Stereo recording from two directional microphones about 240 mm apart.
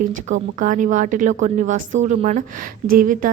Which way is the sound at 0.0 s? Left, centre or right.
Right.